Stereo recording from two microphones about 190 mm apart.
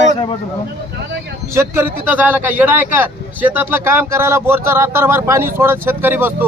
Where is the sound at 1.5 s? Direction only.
15° right (ahead or behind).